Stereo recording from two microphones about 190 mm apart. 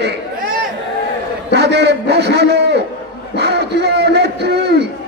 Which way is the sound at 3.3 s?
60° right (ahead or behind).